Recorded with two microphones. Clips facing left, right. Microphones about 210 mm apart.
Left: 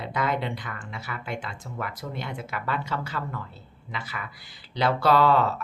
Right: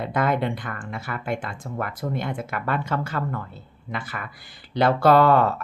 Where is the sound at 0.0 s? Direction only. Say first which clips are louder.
Right 5 dB; 50° right (ahead or behind).